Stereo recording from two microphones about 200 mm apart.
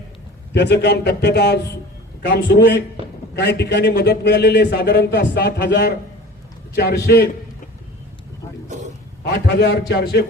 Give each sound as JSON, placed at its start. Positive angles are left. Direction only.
{"t": 0.5, "sound": "a man's voice", "side_deg": 60}
{"t": 9.6, "sound": "speech", "side_deg": 55}